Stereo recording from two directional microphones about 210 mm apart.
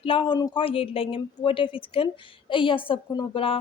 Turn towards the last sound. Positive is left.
turn(degrees=25)  # may be behind; listen again after turning